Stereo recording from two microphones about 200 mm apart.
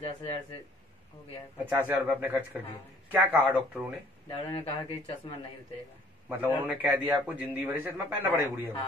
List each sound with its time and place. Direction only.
0.0 s a man's voice: 30° left (ahead or behind)
1.7 s a man's voice: 10° right (ahead or behind)
4.3 s speech: 30° left (ahead or behind)
6.2 s a man's voice: 10° right (ahead or behind)